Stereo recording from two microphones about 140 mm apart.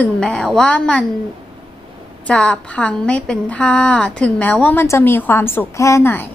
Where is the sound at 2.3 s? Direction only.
5° left (ahead or behind).